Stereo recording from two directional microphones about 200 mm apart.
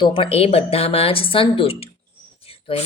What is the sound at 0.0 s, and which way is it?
A woman's voice, 25° left (ahead or behind).